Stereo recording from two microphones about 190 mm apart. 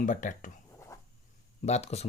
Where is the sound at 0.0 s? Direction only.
40° left (ahead or behind).